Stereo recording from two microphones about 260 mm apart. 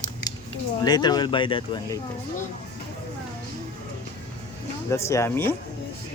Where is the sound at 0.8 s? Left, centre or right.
Centre.